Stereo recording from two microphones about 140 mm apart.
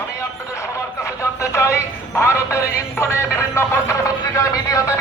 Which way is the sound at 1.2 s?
20° left (ahead or behind).